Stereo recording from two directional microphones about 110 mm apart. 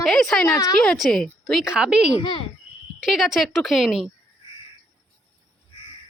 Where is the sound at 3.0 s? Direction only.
5° right (ahead or behind).